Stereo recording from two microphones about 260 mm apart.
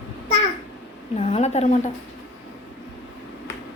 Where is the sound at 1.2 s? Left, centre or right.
Left.